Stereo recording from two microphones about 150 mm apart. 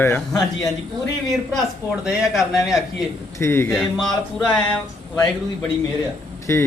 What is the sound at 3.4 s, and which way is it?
Speech, 15° left (ahead or behind).